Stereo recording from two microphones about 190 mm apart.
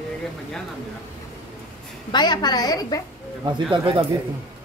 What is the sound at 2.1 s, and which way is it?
Speech, 25° left (ahead or behind).